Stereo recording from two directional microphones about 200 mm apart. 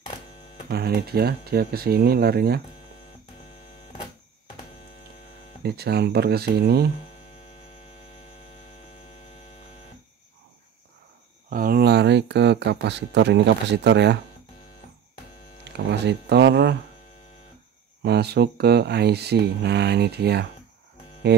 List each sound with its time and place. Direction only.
0.7 s speech: 55° right (ahead or behind)
5.6 s speech: 55° right (ahead or behind)
11.5 s speech: 45° right (ahead or behind)
15.7 s speech: 60° right (ahead or behind)
18.0 s speech: 55° right (ahead or behind)